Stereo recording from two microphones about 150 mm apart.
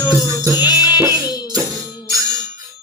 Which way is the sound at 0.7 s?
25° left (ahead or behind).